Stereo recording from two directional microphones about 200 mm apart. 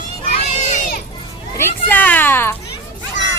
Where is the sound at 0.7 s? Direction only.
40° left (ahead or behind).